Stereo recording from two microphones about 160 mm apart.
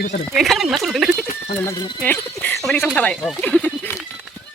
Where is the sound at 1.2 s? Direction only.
55° left (ahead or behind).